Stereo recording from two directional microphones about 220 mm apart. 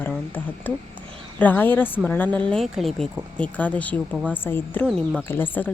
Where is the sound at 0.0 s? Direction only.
10° left (ahead or behind).